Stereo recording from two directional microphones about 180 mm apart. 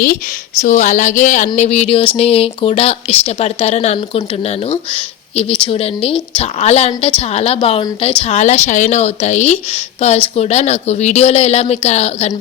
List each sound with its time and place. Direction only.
0.6 s speech: 40° left (ahead or behind)